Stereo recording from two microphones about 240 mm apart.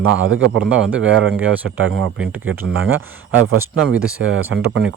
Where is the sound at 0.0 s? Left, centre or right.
Right.